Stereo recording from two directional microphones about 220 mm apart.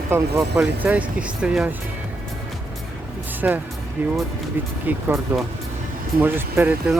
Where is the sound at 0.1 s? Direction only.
15° right (ahead or behind).